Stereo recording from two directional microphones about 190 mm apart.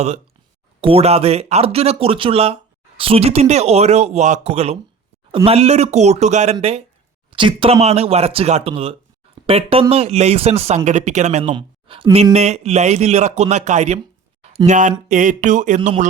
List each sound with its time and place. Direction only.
0.8 s a man's voice: 30° right (ahead or behind)
11.5 s a sound: 25° right (ahead or behind)
12.1 s a man's voice: 35° right (ahead or behind)